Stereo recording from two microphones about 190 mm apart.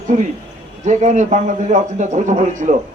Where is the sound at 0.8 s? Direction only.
40° right (ahead or behind).